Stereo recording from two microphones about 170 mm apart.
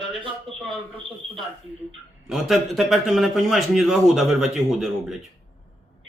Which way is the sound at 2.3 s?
Centre (ahead or behind).